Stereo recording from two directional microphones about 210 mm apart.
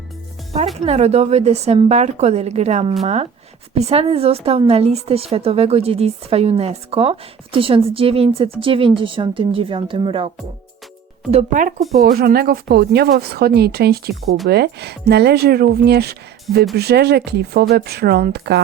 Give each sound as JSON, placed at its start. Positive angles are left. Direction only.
{"t": 0.9, "sound": "a woman's voice", "side_deg": -30}
{"t": 11.3, "sound": "a woman's voice", "side_deg": -35}
{"t": 12.0, "sound": "speech", "side_deg": -45}